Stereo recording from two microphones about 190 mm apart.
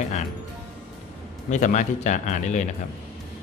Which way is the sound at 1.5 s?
40° left (ahead or behind).